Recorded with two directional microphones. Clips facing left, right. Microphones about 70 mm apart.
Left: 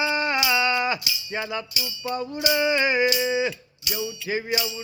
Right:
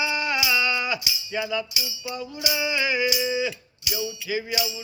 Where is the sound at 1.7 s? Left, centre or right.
Centre.